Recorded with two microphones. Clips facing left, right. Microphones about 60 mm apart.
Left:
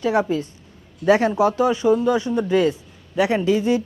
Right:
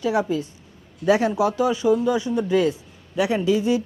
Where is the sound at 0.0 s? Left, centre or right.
Left.